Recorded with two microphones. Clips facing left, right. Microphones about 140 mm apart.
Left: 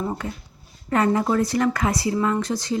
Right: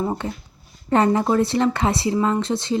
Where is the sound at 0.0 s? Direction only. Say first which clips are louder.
Right 3 dB; 25° right (ahead or behind).